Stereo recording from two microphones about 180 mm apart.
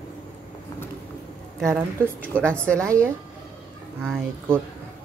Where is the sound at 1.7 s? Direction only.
15° right (ahead or behind).